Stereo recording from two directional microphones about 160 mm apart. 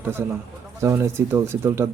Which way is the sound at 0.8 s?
15° right (ahead or behind).